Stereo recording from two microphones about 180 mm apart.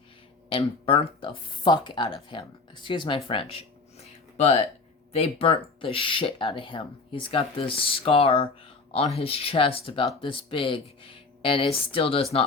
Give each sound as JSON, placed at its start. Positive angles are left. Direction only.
{"t": 0.5, "sound": "speech", "side_deg": 30}